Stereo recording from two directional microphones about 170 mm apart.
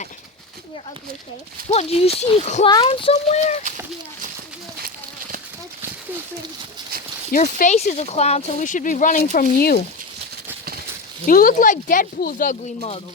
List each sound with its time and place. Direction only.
1.7 s speech: 35° left (ahead or behind)
2.6 s speech: 30° left (ahead or behind)
7.3 s speech: 50° left (ahead or behind)
11.3 s speech: 55° left (ahead or behind)